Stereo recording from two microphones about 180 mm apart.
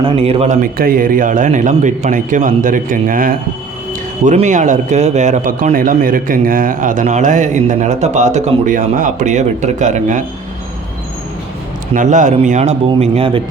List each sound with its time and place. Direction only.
0.0 s speech: 35° right (ahead or behind)
11.9 s speech: 45° right (ahead or behind)